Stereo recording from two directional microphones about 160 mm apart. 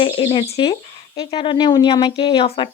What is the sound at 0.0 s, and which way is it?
Speech, 35° left (ahead or behind).